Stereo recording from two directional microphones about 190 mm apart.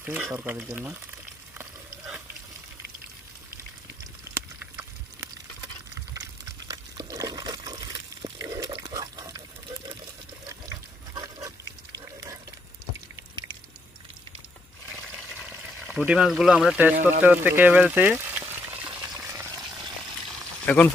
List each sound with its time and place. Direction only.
0.0 s speech: 10° right (ahead or behind)
4.6 s a sound: 15° right (ahead or behind)
6.7 s water: 20° right (ahead or behind)
10.5 s water: 20° right (ahead or behind)
15.4 s pour: 5° right (ahead or behind)
17.0 s speech: 10° right (ahead or behind)
18.9 s a sound: 20° right (ahead or behind)
20.7 s speech: 10° left (ahead or behind)